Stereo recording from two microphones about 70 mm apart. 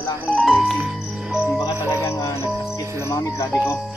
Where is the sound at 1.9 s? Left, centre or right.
Left.